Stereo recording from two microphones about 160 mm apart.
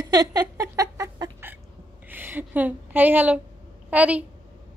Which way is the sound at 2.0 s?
10° right (ahead or behind).